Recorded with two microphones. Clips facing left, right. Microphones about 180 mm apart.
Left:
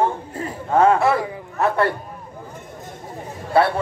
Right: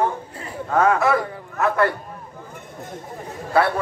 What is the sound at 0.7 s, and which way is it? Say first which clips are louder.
Speech: left 2 dB; 30° left (ahead or behind).